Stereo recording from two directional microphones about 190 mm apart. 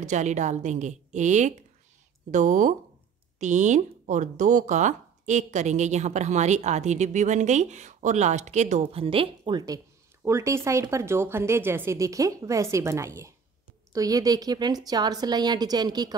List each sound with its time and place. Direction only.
0.0 s a woman's voice: 40° right (ahead or behind); by 16.2 s 20° right (ahead or behind)